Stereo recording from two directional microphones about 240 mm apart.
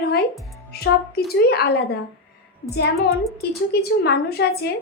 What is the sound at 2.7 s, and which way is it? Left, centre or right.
A woman's voice, left.